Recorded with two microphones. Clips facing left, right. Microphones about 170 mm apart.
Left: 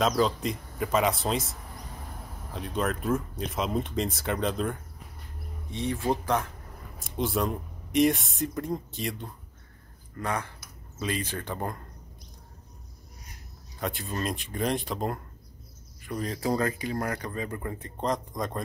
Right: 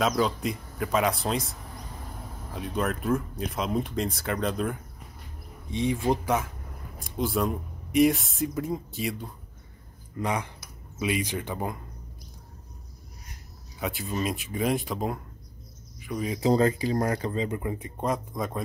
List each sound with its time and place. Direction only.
0.2 s speech: centre (ahead or behind)
2.5 s speech: centre (ahead or behind)
5.7 s speech: 15° right (ahead or behind)
10.1 s speech: 15° right (ahead or behind)
13.7 s speech: 5° right (ahead or behind)
16.3 s speech: 25° right (ahead or behind); by 18.6 s 5° right (ahead or behind)